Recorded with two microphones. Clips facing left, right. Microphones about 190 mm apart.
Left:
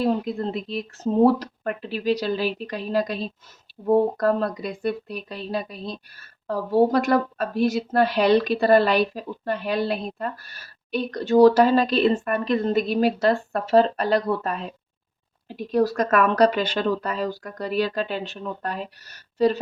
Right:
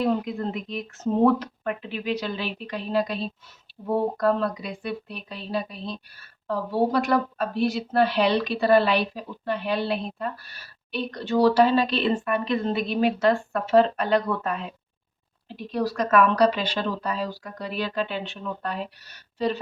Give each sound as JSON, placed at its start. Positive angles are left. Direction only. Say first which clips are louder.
{"t": 0.0, "sound": "speech", "louder": "left 1 dB", "side_deg": 35}